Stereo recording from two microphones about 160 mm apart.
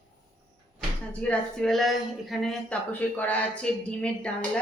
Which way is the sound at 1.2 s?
5° left (ahead or behind).